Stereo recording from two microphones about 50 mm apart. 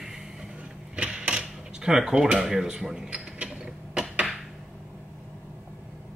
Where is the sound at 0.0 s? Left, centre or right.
Centre.